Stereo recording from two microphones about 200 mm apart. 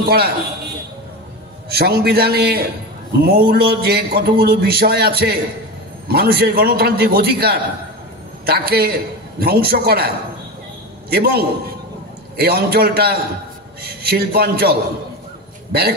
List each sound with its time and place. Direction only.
0.0 s a man's voice: 50° right (ahead or behind)
1.7 s a man's voice: 50° right (ahead or behind)